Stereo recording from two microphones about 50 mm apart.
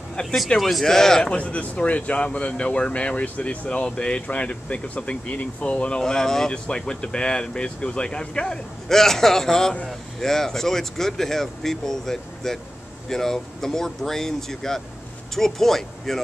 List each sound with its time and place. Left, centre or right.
0.6 s speech: centre
1.3 s speech: left; by 16.2 s centre